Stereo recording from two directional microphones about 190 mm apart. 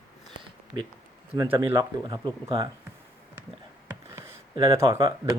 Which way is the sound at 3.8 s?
15° right (ahead or behind).